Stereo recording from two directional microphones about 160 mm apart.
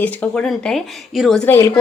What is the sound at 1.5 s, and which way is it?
Speech, 15° left (ahead or behind).